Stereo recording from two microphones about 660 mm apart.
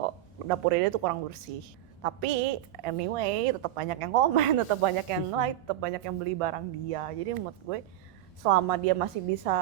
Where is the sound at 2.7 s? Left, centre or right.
Right.